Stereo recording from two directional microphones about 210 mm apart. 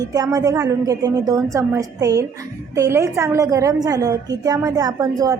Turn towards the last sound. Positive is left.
turn(degrees=-15)  # may be behind; listen again after turning